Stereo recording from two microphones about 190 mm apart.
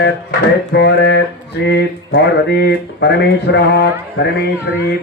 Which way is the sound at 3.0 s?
65° left (ahead or behind).